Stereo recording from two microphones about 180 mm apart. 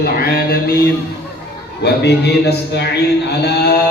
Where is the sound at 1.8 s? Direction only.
65° left (ahead or behind).